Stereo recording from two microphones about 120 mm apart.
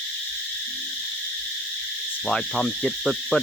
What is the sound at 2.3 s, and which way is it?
Speech, 5° left (ahead or behind).